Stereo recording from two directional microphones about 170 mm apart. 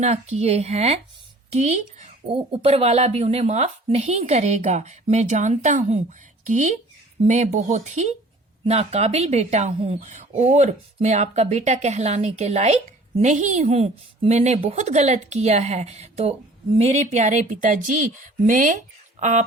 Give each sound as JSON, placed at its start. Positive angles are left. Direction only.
{"t": 0.0, "sound": "speech", "side_deg": -40}